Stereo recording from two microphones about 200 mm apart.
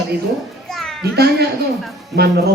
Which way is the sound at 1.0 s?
55° right (ahead or behind).